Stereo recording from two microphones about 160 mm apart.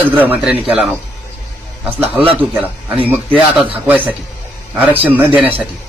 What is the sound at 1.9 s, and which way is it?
Speech, 10° right (ahead or behind).